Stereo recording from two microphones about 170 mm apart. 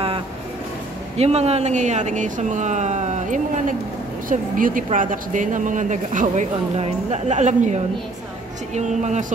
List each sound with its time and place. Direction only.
1.1 s a woman's voice: 40° right (ahead or behind)